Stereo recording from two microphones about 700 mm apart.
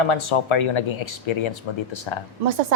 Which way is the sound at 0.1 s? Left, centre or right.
Left.